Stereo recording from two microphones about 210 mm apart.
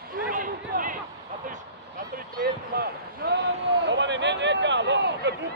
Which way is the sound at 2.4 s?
50° right (ahead or behind).